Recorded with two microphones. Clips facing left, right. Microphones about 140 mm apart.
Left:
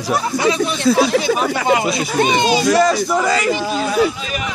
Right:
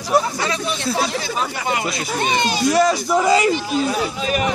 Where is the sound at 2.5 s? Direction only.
90° left.